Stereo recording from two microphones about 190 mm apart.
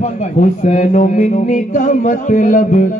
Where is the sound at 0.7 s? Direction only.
40° left (ahead or behind).